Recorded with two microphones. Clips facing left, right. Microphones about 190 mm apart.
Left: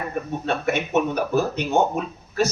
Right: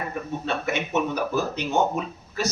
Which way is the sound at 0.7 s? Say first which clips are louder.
Left 4 dB; 55° left (ahead or behind).